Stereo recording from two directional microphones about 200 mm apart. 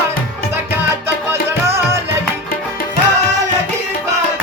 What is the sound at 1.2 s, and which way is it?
Music, 15° right (ahead or behind).